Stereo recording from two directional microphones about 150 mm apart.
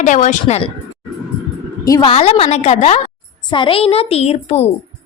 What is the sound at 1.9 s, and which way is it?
Speech, 25° left (ahead or behind).